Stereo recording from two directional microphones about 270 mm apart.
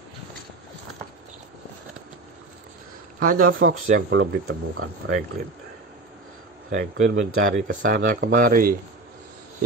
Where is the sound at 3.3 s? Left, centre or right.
Right.